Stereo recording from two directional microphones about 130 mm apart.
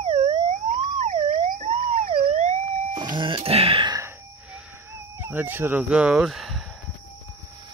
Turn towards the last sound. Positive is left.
turn(degrees=0)  # may be behind; listen again after turning